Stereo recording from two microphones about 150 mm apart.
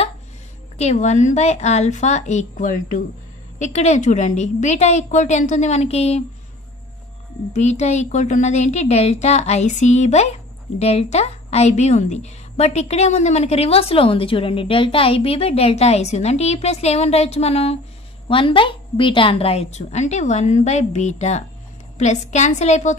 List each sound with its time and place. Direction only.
0.7 s a woman's voice: 50° left (ahead or behind)
7.5 s a woman's voice: 50° left (ahead or behind)